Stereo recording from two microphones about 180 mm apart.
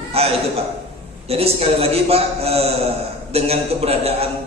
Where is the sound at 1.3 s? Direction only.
35° right (ahead or behind).